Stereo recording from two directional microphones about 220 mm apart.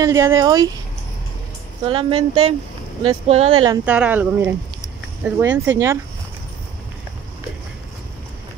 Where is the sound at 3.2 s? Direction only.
25° right (ahead or behind).